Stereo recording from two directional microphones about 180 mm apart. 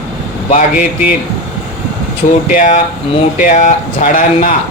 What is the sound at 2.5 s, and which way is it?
Speech, 45° left (ahead or behind).